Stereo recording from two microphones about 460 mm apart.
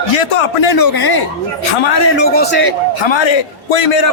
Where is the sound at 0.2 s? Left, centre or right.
Left.